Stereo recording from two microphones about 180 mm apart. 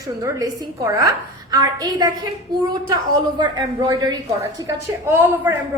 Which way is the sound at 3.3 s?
20° right (ahead or behind).